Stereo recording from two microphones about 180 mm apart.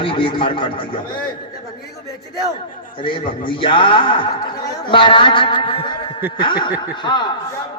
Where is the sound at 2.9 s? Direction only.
30° left (ahead or behind).